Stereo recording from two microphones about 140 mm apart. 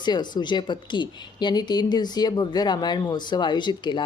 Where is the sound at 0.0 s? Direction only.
30° left (ahead or behind).